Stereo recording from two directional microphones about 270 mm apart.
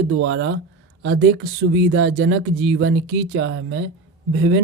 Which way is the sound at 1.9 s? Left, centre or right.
Right.